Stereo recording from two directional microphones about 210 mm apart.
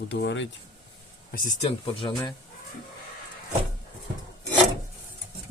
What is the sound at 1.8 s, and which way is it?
Speech, 25° left (ahead or behind).